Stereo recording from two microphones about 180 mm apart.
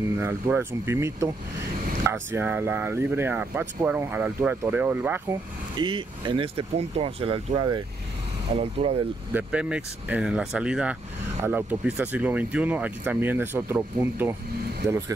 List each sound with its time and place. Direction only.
0.2 s speech: 10° right (ahead or behind)
5.8 s speech: 25° right (ahead or behind)
9.3 s speech: 5° right (ahead or behind)